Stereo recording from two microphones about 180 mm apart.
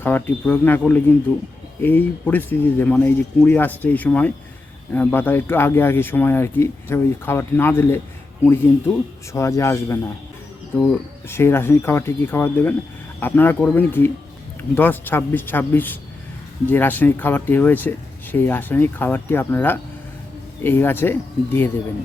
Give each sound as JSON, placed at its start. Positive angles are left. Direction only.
{"t": 0.0, "sound": "speech", "side_deg": 10}
{"t": 9.3, "sound": "speech", "side_deg": 15}